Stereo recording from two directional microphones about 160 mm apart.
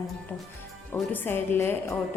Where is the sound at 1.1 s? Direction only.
15° left (ahead or behind).